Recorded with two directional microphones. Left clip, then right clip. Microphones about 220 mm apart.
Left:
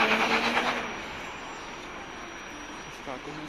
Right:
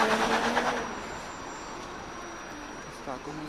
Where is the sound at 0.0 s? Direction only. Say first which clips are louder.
Left 1 dB; 40° right (ahead or behind).